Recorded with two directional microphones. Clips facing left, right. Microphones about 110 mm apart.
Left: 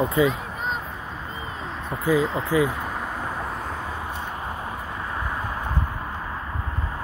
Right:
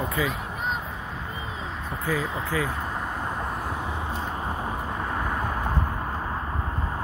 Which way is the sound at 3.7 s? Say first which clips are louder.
Right 1 dB; 20° right (ahead or behind).